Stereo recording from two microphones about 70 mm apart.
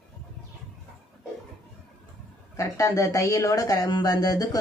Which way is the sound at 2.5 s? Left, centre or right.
Left.